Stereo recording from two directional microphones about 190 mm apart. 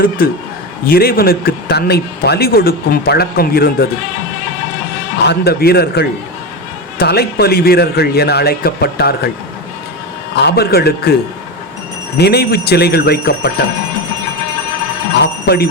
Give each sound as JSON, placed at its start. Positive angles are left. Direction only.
{"t": 0.2, "sound": "a man's voice", "side_deg": 50}
{"t": 5.2, "sound": "a man's voice", "side_deg": 60}
{"t": 10.3, "sound": "a man's voice", "side_deg": 60}
{"t": 12.1, "sound": "a man's voice", "side_deg": 60}
{"t": 15.2, "sound": "speech", "side_deg": 55}